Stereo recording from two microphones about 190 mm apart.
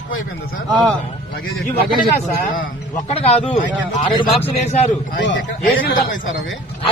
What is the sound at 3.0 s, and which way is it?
Speech, 30° left (ahead or behind).